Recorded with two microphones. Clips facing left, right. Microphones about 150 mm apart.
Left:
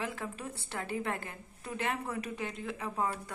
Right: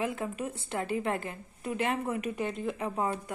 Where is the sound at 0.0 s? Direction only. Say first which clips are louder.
Right 6 dB; 15° right (ahead or behind).